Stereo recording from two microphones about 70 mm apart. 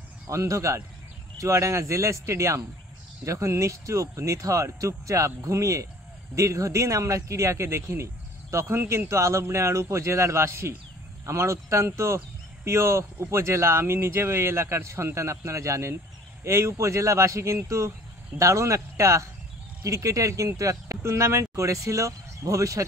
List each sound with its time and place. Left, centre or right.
0.3 s speech: right